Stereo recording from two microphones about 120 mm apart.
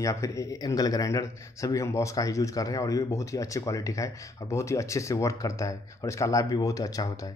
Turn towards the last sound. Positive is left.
turn(degrees=30)  # may be behind; listen again after turning